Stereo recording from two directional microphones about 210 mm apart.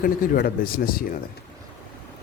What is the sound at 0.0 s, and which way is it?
A man's voice, 45° left (ahead or behind).